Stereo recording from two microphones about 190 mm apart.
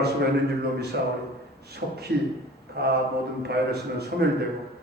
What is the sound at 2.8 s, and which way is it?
Speech, 55° right (ahead or behind).